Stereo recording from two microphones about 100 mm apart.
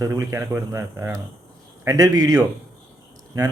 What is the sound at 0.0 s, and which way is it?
Speech, 30° right (ahead or behind).